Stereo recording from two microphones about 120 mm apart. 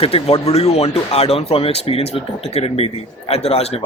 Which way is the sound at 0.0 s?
50° left (ahead or behind).